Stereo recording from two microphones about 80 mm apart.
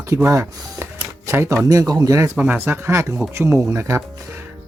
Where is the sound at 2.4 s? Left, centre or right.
Right.